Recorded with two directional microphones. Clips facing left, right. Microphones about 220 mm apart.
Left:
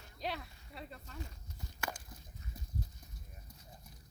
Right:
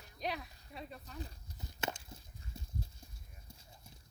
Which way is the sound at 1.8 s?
25° right (ahead or behind).